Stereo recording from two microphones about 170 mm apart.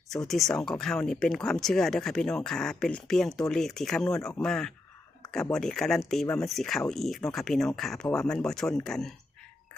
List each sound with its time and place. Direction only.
0.3 s speech: centre (ahead or behind)